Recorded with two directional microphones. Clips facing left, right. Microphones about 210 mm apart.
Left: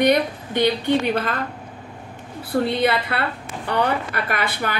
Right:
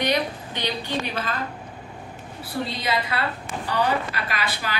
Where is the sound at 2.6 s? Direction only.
60° left (ahead or behind).